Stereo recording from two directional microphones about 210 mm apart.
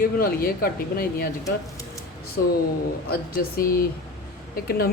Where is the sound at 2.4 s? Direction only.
50° left (ahead or behind).